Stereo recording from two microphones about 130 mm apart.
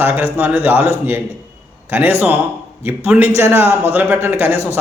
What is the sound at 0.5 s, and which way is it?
A man's voice, 15° right (ahead or behind).